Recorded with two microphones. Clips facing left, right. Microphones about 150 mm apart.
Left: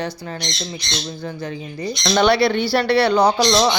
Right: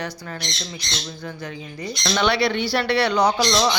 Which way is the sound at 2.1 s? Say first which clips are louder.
Left 5 dB; 35° left (ahead or behind).